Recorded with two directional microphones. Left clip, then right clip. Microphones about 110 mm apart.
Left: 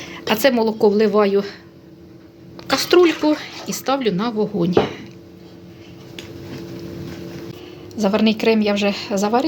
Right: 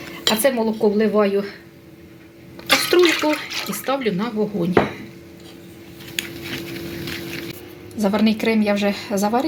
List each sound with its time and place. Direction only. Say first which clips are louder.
0.3 s speech: left 2 dB; 40° left (ahead or behind)
2.6 s water: left 1 dB; 25° left (ahead or behind)
3.2 s speech: left 1 dB; 25° left (ahead or behind)
7.9 s a woman's voice: left 2 dB; 10° left (ahead or behind)